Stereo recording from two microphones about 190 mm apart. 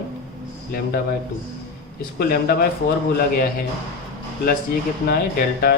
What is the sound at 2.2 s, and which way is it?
Speech, 50° left (ahead or behind).